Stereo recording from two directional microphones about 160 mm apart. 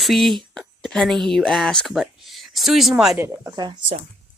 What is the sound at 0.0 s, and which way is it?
Speech, centre (ahead or behind).